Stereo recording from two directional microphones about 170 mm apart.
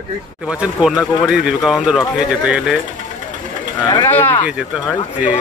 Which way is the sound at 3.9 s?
25° left (ahead or behind).